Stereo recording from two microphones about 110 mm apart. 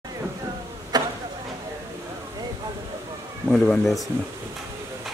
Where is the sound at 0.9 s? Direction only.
40° right (ahead or behind).